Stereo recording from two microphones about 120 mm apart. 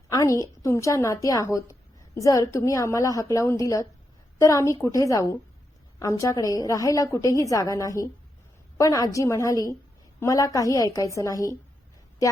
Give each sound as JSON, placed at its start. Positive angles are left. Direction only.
{"t": 0.1, "sound": "a woman's voice", "side_deg": 30}